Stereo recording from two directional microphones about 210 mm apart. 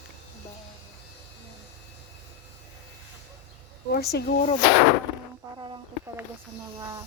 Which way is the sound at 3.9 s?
50° left (ahead or behind).